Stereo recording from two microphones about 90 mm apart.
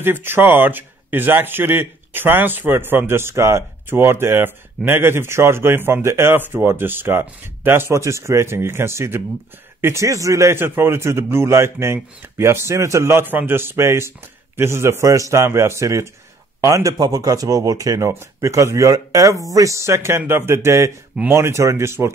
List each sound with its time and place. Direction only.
0.0 s speech: 25° right (ahead or behind)